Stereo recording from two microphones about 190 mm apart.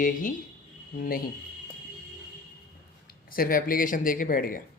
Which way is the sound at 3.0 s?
50° left (ahead or behind).